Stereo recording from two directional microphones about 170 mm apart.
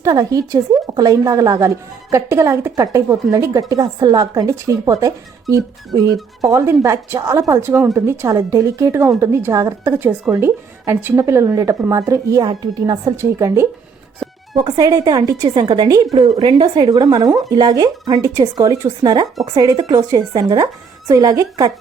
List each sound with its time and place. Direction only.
0.0 s a woman's voice: 20° right (ahead or behind)